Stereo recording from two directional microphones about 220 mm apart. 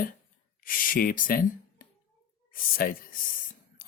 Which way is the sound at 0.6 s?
40° left (ahead or behind).